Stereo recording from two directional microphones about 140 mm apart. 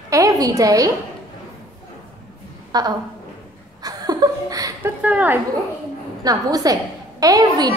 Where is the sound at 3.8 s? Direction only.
25° right (ahead or behind).